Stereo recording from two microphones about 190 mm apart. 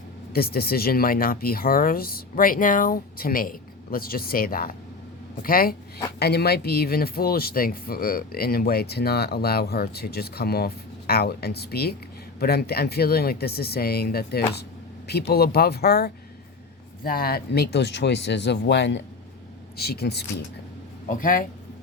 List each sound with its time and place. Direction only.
0.3 s speech: 55° left (ahead or behind)
19.7 s speech: 55° left (ahead or behind)
21.1 s speech: 45° left (ahead or behind)